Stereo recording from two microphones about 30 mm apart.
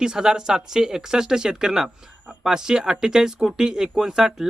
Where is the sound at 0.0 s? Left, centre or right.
Right.